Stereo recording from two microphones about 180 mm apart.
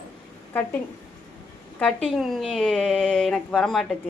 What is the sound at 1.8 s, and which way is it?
A woman's voice, centre (ahead or behind).